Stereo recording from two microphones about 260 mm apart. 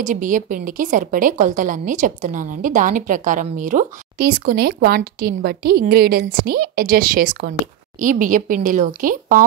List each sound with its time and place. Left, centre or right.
0.0 s a woman's voice: right